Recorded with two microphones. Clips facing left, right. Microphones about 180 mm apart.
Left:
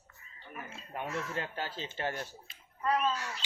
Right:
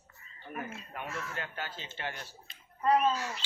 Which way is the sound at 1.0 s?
30° left (ahead or behind).